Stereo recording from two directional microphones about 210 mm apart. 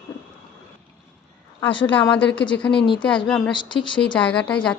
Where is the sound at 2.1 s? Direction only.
5° left (ahead or behind).